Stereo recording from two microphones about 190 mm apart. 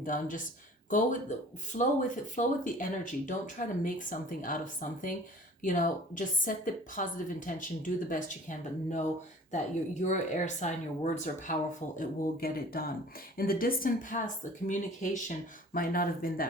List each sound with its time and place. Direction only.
0.0 s a woman's voice: 45° left (ahead or behind)